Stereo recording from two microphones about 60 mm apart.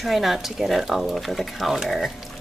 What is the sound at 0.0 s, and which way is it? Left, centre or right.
Speech, centre.